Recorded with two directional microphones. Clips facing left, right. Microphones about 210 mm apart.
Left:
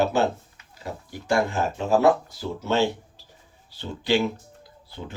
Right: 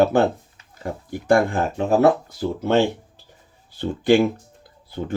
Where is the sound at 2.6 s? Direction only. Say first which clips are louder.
Right 4 dB; 55° right (ahead or behind).